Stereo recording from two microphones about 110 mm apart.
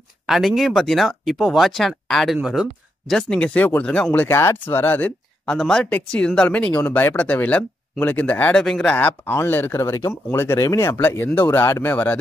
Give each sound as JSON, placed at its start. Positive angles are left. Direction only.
{"t": 0.3, "sound": "speech", "side_deg": 0}
{"t": 3.2, "sound": "speech", "side_deg": 10}
{"t": 8.9, "sound": "speech", "side_deg": 15}